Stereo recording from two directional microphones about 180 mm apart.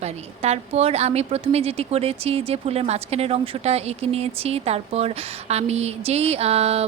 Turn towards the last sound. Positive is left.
turn(degrees=-35)  # may be behind; listen again after turning